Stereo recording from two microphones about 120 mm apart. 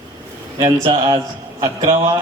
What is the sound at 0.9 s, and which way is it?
Speech, 45° right (ahead or behind).